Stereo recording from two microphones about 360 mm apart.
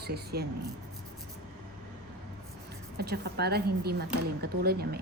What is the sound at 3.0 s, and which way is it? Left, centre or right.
A woman's voice, right.